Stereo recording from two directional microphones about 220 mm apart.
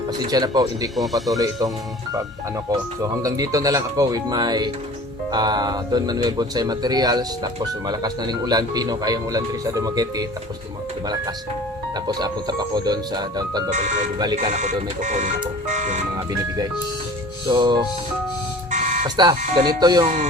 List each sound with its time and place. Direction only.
0.1 s speech: 15° right (ahead or behind)
0.9 s speech: centre (ahead or behind)
1.4 s speech: 15° right (ahead or behind)
12.0 s speech: 20° right (ahead or behind)
13.7 s speech: 35° right (ahead or behind)
16.1 s speech: 15° right (ahead or behind)
18.7 s a sound: 35° right (ahead or behind)
19.0 s speech: 20° right (ahead or behind)